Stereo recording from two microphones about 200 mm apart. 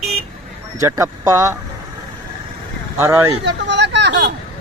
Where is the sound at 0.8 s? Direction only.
15° right (ahead or behind).